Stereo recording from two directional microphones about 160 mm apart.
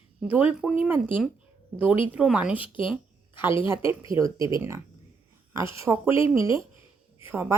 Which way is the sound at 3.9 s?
20° right (ahead or behind).